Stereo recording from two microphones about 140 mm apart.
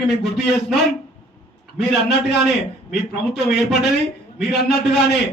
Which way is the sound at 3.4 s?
Centre (ahead or behind).